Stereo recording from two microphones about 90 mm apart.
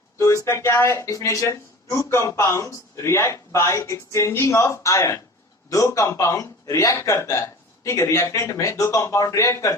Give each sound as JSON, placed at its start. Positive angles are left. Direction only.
{"t": 0.2, "sound": "speech", "side_deg": 30}